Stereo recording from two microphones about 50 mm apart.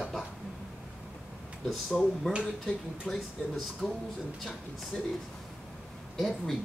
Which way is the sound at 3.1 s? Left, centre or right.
Centre.